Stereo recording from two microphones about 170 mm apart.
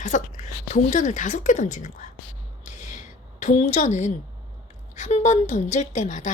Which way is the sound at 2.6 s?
45° left (ahead or behind).